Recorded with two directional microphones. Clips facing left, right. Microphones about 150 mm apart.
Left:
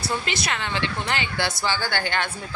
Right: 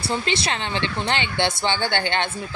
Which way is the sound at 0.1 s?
30° right (ahead or behind).